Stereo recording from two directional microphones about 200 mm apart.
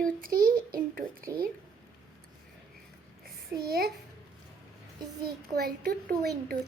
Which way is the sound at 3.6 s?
50° right (ahead or behind).